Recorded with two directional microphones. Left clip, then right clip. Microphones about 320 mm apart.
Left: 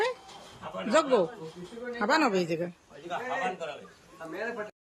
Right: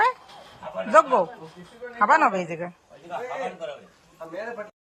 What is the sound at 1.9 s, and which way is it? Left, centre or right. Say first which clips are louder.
Speech: right 7 dB; centre.